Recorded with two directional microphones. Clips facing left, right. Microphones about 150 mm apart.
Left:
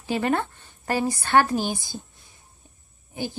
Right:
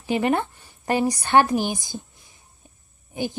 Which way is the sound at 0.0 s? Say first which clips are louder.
Right 2 dB; 20° right (ahead or behind).